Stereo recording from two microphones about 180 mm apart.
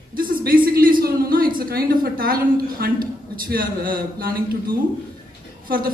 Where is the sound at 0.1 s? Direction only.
55° right (ahead or behind).